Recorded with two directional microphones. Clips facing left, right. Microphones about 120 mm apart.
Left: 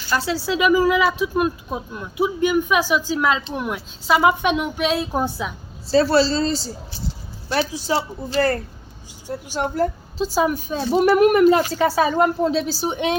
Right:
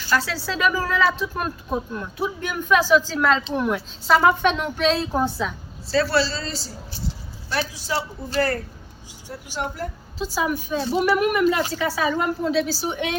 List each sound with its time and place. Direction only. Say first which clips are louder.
0.1 s a woman's voice: left 2 dB; 20° left (ahead or behind)
7.7 s a woman's voice: left 4 dB; 25° left (ahead or behind)
9.5 s a woman's voice: left 7 dB; 30° left (ahead or behind)